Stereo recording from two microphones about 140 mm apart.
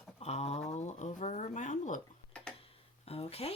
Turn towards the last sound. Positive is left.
turn(degrees=45)  # may be behind; listen again after turning